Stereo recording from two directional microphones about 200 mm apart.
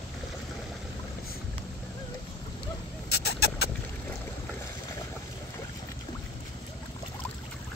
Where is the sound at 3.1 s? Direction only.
55° left (ahead or behind).